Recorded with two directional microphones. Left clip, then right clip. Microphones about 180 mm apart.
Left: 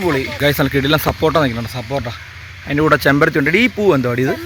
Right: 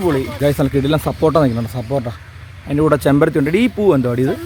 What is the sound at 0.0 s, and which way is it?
Speech, 10° right (ahead or behind).